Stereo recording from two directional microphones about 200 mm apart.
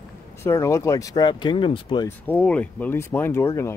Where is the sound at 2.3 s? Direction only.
5° left (ahead or behind).